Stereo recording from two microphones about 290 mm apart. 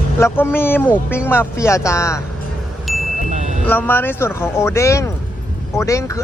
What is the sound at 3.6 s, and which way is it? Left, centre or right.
Speech, centre.